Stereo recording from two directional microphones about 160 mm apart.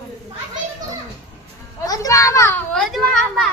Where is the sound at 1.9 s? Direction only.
20° left (ahead or behind).